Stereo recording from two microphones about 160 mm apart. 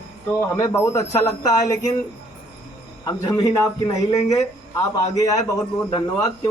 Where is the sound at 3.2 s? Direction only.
20° left (ahead or behind).